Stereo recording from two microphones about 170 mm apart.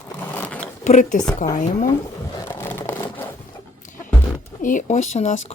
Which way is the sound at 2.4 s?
15° left (ahead or behind).